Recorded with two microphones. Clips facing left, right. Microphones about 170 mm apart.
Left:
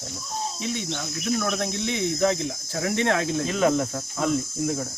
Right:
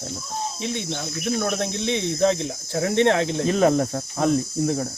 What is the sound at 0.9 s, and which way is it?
Cricket, 30° right (ahead or behind).